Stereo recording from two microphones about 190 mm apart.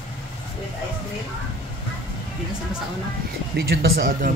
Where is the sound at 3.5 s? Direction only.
55° right (ahead or behind).